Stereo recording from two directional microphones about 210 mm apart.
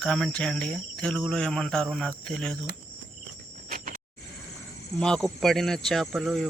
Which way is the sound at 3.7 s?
40° right (ahead or behind).